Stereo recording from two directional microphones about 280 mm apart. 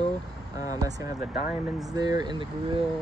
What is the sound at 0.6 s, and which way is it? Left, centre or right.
Vehicle, centre.